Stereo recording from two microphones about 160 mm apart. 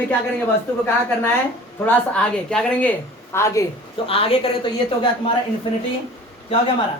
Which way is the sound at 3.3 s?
15° left (ahead or behind).